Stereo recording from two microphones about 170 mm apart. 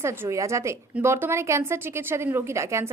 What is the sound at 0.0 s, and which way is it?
A woman's voice, 15° right (ahead or behind).